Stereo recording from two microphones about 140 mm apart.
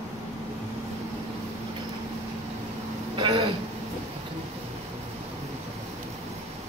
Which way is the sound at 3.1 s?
35° right (ahead or behind).